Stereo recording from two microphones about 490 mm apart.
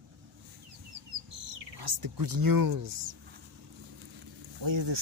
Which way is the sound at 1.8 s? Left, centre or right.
Right.